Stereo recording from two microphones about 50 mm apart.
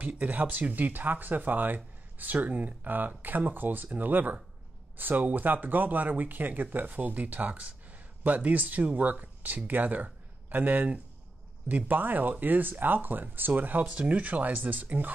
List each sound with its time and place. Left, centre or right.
0.2 s speech: right